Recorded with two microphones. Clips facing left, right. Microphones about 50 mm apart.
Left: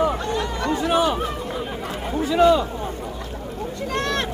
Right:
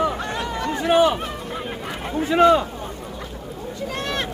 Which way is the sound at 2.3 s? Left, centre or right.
Right.